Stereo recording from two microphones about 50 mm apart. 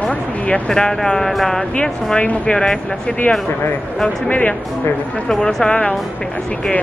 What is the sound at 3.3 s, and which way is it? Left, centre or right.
Speech, left.